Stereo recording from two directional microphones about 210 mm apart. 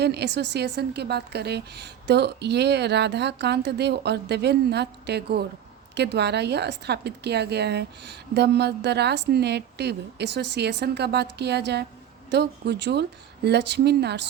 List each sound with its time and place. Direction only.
0.0 s a woman's voice: 50° right (ahead or behind)